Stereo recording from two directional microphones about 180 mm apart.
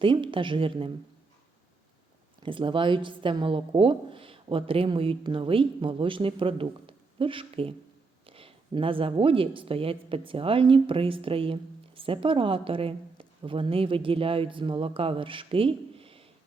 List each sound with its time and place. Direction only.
0.0 s speech: 25° right (ahead or behind)
2.4 s speech: 30° right (ahead or behind)